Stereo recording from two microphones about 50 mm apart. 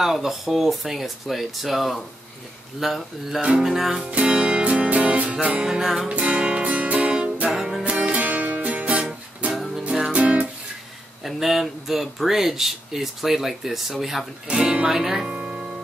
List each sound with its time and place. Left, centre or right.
0.0 s speech: centre
4.1 s music: right
5.8 s speech: centre
6.0 s music: right
7.5 s music: centre
7.8 s music: right
11.2 s speech: centre
14.5 s speech: centre
14.9 s speech: centre
15.3 s music: centre